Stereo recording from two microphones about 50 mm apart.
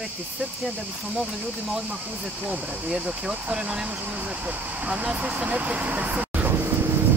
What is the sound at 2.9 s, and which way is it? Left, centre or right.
Speech, centre.